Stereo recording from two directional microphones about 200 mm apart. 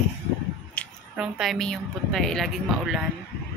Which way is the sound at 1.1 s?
Centre (ahead or behind).